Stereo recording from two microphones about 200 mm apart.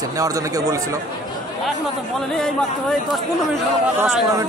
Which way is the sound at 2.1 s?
5° left (ahead or behind).